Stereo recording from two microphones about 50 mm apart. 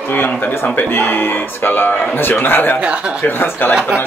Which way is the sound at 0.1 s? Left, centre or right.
Left.